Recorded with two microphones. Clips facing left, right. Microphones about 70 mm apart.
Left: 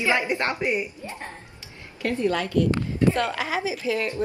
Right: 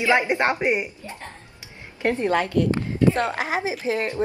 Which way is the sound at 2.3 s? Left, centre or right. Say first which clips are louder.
Right 4 dB; right.